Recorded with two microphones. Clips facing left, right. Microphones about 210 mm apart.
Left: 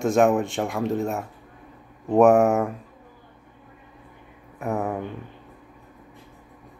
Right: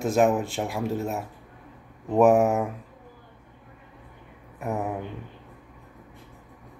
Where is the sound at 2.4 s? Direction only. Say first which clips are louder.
Left 3 dB; centre (ahead or behind).